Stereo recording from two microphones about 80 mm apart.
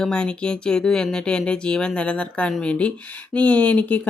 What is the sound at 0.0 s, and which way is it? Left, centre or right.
Speech, centre.